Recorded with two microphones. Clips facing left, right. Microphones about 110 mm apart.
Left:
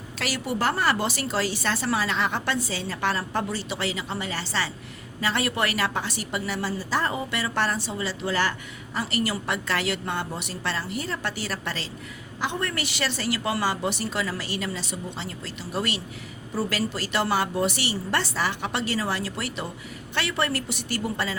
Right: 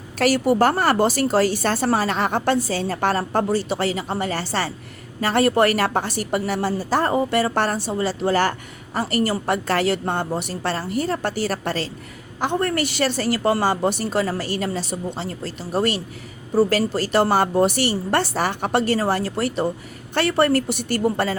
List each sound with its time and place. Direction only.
0.2 s a woman's voice: 45° right (ahead or behind)